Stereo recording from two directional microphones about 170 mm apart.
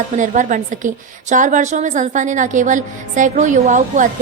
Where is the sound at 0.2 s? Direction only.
50° right (ahead or behind).